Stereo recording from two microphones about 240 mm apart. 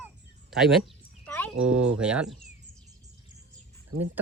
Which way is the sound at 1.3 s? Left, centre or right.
Centre.